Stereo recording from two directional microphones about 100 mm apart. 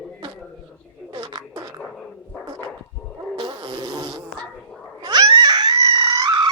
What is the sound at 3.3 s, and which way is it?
Insect, 50° right (ahead or behind).